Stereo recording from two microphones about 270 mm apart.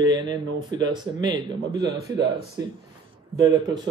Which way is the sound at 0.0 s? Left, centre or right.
Centre.